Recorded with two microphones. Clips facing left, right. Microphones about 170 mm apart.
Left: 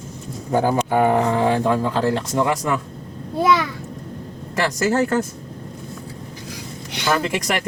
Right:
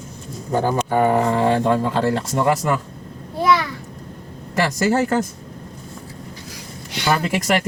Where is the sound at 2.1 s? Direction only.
5° right (ahead or behind).